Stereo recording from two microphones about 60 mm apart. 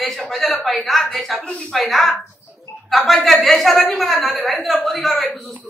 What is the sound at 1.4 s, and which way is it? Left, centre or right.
Speech, centre.